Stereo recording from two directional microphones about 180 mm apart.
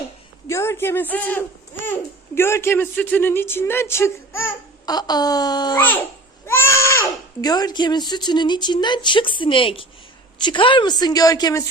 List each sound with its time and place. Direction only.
0.4 s a child's voice: 15° left (ahead or behind)